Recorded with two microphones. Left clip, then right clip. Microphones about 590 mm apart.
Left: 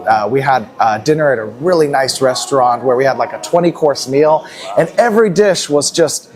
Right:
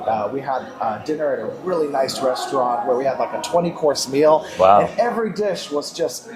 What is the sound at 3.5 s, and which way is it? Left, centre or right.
Speech, left.